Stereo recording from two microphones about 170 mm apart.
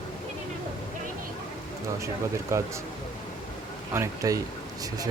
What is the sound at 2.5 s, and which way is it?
Speech, 15° right (ahead or behind).